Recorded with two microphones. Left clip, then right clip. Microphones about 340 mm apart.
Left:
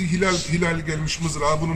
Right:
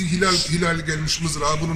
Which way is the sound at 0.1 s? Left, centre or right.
Centre.